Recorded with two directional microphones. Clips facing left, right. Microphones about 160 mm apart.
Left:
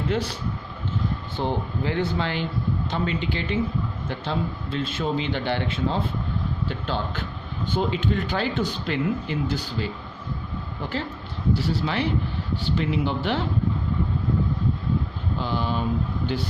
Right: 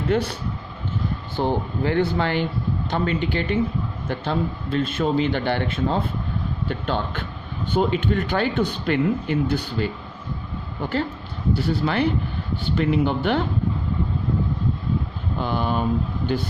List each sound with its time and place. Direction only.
0.1 s speech: 55° right (ahead or behind)
1.4 s a man's voice: 55° right (ahead or behind)
11.5 s a man's voice: 55° right (ahead or behind)
15.4 s a sound: 55° right (ahead or behind)